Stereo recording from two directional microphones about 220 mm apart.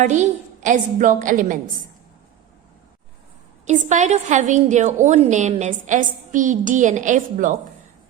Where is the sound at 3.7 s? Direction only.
30° right (ahead or behind).